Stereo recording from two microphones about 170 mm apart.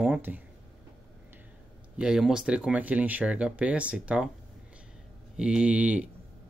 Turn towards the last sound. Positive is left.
turn(degrees=-10)  # may be behind; listen again after turning